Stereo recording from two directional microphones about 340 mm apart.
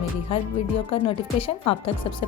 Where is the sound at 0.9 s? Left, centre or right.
Centre.